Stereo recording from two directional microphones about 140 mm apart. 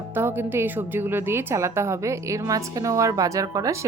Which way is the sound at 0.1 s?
15° right (ahead or behind).